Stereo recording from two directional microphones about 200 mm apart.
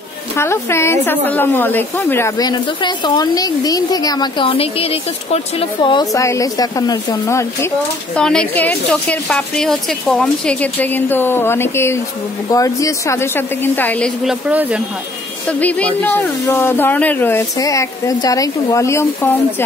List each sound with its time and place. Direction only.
0.4 s speech: 15° left (ahead or behind)
8.2 s speech: 5° left (ahead or behind)
14.5 s speech: 5° right (ahead or behind)
15.4 s speech: 5° left (ahead or behind)